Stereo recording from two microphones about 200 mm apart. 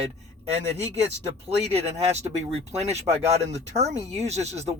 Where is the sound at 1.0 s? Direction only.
30° right (ahead or behind).